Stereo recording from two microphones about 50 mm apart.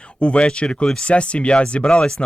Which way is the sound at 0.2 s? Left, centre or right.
Left.